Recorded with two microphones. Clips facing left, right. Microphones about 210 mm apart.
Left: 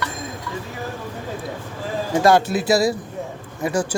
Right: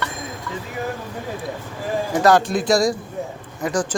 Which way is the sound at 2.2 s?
25° left (ahead or behind).